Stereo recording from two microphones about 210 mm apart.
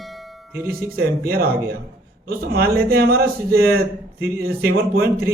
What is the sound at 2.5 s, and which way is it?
Speech, 50° right (ahead or behind).